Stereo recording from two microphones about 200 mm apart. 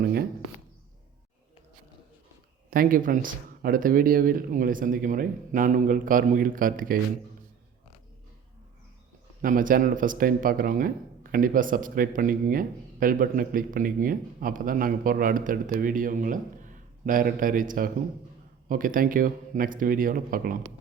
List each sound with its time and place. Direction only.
0.0 s a sound: 50° right (ahead or behind)
2.6 s speech: 45° right (ahead or behind)
9.4 s speech: 45° right (ahead or behind)